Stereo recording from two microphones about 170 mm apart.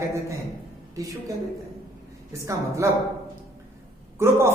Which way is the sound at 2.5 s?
15° right (ahead or behind).